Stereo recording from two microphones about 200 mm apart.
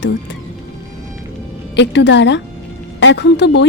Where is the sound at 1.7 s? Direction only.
60° left (ahead or behind).